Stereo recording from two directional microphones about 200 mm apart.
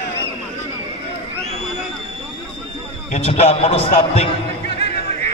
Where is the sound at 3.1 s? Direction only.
30° left (ahead or behind).